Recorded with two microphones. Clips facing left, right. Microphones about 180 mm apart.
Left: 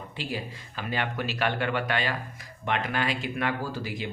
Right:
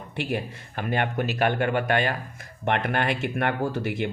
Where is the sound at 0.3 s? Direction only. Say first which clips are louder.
Right 4 dB; 55° right (ahead or behind).